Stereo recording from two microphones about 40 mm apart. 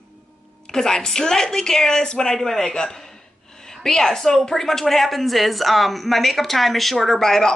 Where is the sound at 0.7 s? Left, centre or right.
Centre.